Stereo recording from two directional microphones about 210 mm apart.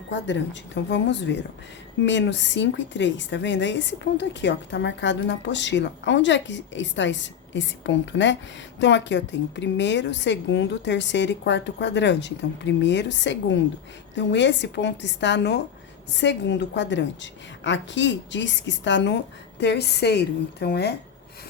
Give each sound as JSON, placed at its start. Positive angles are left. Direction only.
{"t": 0.1, "sound": "a woman's voice", "side_deg": 60}